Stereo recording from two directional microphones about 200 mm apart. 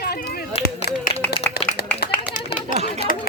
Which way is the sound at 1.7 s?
55° left (ahead or behind).